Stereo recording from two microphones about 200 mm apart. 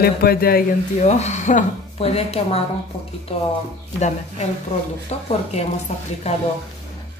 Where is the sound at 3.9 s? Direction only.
35° left (ahead or behind).